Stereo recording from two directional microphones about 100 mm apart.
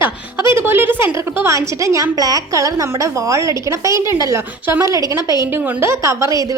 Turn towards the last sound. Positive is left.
turn(degrees=-35)  # may be behind; listen again after turning